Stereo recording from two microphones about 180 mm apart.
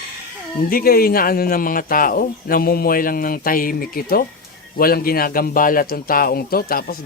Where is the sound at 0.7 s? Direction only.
55° left (ahead or behind).